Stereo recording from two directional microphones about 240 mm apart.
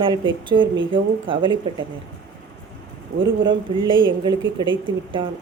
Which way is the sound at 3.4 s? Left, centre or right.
Centre.